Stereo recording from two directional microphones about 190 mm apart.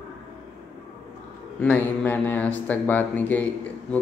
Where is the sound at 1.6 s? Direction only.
10° left (ahead or behind).